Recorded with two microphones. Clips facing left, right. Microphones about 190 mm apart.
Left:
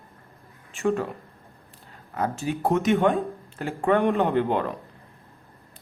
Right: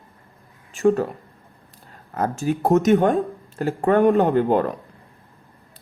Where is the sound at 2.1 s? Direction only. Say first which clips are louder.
Right 4 dB; 45° right (ahead or behind).